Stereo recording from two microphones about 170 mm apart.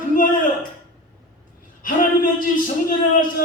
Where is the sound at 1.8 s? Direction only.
55° left (ahead or behind).